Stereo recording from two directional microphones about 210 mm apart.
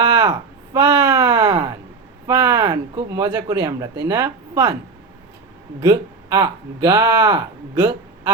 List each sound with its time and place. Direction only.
0.1 s a sound: 20° right (ahead or behind)
2.2 s speech: 15° right (ahead or behind)
5.8 s speech: 15° right (ahead or behind)